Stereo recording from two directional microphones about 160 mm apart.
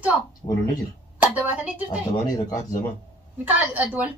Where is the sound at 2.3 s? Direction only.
25° left (ahead or behind).